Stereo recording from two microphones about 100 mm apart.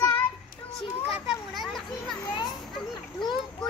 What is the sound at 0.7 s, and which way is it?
Music, 5° right (ahead or behind).